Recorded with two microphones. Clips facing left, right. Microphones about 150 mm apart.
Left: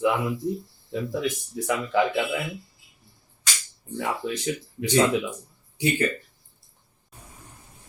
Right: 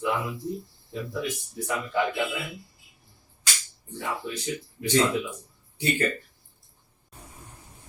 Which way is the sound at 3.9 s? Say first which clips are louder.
Left 4 dB; 90° left.